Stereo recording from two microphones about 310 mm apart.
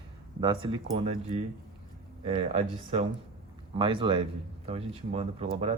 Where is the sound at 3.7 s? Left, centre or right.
Centre.